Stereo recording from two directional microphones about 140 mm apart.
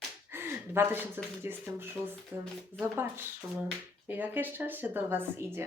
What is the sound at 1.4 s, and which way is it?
Speech, 15° right (ahead or behind).